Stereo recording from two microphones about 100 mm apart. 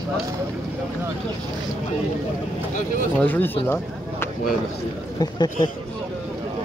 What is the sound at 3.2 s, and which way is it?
Speech, 20° left (ahead or behind).